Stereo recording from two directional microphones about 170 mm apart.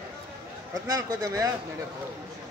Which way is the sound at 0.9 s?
20° right (ahead or behind).